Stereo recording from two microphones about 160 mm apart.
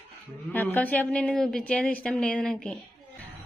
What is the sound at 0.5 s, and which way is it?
A woman's voice, 10° left (ahead or behind).